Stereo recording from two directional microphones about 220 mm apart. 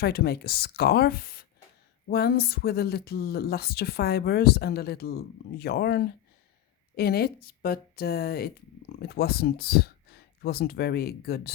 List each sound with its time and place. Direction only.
0.0 s speech: 45° left (ahead or behind)